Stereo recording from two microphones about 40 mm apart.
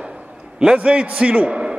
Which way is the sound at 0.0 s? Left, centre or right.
Centre.